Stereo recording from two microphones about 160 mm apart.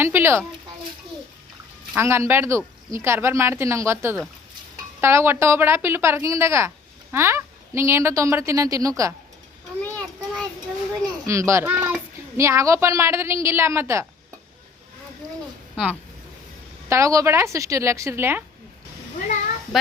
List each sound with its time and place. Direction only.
0.0 s speech: 15° right (ahead or behind)
2.0 s speech: 15° right (ahead or behind)
9.8 s a sound: 10° left (ahead or behind)
11.3 s speech: 20° right (ahead or behind)
15.7 s speech: 5° right (ahead or behind)
16.9 s a woman's voice: 20° right (ahead or behind)
19.7 s a sound: centre (ahead or behind)